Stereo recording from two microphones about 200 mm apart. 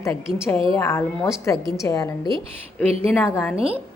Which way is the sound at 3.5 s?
30° right (ahead or behind).